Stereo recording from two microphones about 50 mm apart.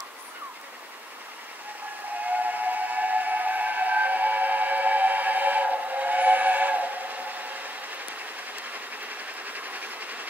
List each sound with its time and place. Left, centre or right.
2.2 s steam whistle: right
8.7 s train: right